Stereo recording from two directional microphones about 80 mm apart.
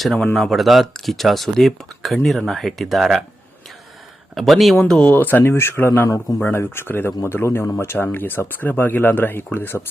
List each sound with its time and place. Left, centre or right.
0.0 s speech: centre
4.4 s speech: centre
4.8 s speech: centre